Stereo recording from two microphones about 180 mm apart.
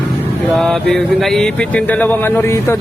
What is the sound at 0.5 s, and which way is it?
Mantra, 5° left (ahead or behind).